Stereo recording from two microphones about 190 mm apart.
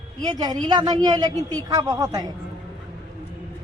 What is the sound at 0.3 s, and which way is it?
A woman's voice, 20° right (ahead or behind).